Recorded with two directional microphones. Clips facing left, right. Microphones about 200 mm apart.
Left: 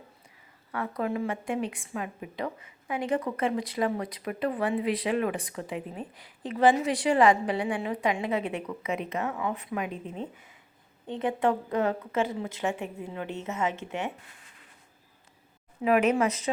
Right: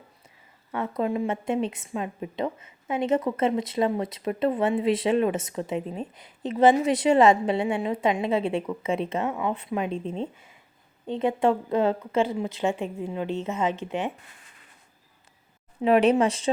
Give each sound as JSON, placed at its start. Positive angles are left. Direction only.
{"t": 0.7, "sound": "a woman's voice", "side_deg": -25}
{"t": 10.3, "sound": "speech", "side_deg": 20}
{"t": 11.0, "sound": "a woman's voice", "side_deg": -25}
{"t": 15.8, "sound": "a woman's voice", "side_deg": -30}